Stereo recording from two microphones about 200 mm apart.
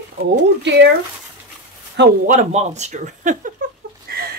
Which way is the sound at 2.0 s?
60° right (ahead or behind).